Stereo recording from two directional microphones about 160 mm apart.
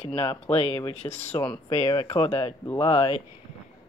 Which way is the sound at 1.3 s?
10° left (ahead or behind).